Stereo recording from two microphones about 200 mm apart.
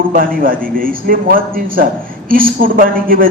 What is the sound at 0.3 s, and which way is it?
Jingle bell, 45° right (ahead or behind).